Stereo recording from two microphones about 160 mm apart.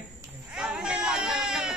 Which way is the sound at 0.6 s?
5° right (ahead or behind).